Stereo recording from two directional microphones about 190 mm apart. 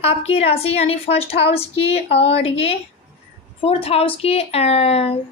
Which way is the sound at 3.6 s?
30° left (ahead or behind).